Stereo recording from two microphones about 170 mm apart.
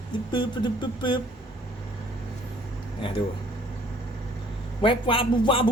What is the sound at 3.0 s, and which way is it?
Speech, 30° left (ahead or behind).